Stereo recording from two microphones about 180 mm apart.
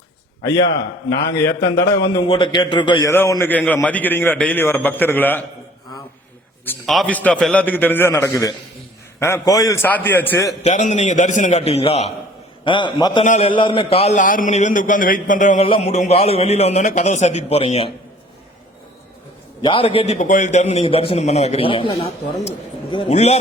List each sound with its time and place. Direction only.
0.4 s a man's voice: 20° left (ahead or behind)
2.2 s a man's voice: 25° left (ahead or behind); by 5.4 s 10° left (ahead or behind)
6.7 s a man's voice: centre (ahead or behind)
10.6 s a man's voice: 40° left (ahead or behind); by 13.2 s 25° left (ahead or behind)
13.2 s a man's voice: 45° left (ahead or behind)
13.5 s a man's voice: 30° left (ahead or behind); by 15.6 s 45° left (ahead or behind)
15.6 s a man's voice: 35° left (ahead or behind)
19.6 s a man's voice: 30° left (ahead or behind)